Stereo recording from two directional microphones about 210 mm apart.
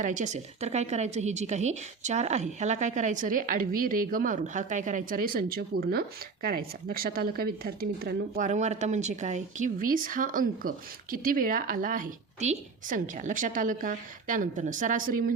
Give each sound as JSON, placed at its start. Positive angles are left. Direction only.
{"t": 0.0, "sound": "a woman's voice", "side_deg": -35}